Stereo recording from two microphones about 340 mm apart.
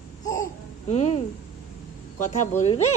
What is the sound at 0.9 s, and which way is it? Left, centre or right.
Speech, centre.